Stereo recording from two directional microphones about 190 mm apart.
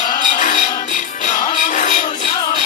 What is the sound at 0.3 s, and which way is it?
Music, 40° left (ahead or behind).